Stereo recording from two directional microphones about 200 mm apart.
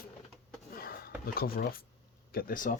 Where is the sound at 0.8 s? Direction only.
50° left (ahead or behind).